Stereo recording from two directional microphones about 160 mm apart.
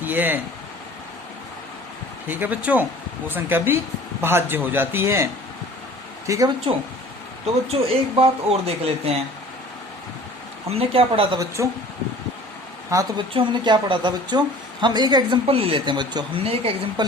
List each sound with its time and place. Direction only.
0.0 s speech: 10° right (ahead or behind)
2.2 s a man's voice: 10° right (ahead or behind)
7.7 s speech: 35° right (ahead or behind)
10.7 s speech: 40° right (ahead or behind)
11.3 s a woman's voice: 20° right (ahead or behind)
12.9 s a woman's voice: 20° right (ahead or behind); by 16.7 s 35° right (ahead or behind)